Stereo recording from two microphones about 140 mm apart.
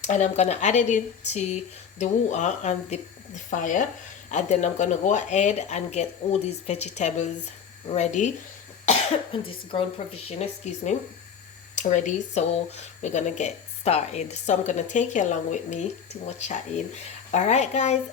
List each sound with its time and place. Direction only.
0.0 s speech: 60° left (ahead or behind)
9.3 s speech: 45° left (ahead or behind)